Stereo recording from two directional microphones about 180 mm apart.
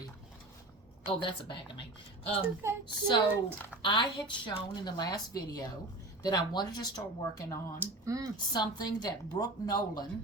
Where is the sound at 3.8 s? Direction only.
25° left (ahead or behind).